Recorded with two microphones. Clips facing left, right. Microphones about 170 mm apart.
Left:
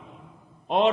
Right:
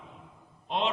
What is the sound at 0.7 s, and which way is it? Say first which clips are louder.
Speech: left 8 dB; 50° left (ahead or behind).